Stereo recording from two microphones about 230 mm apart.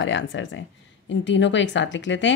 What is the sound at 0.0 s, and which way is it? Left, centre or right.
A woman's voice, left.